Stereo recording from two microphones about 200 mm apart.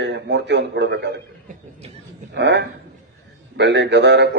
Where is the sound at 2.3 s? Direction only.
60° right (ahead or behind).